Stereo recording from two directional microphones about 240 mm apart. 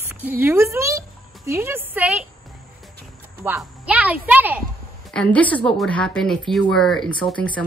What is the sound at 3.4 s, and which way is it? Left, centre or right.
Speech, centre.